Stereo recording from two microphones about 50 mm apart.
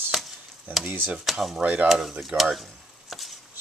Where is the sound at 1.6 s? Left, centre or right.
Right.